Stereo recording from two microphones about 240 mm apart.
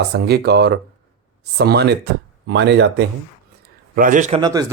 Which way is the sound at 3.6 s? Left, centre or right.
Right.